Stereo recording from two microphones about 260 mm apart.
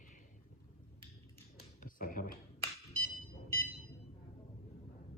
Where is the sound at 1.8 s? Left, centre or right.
Left.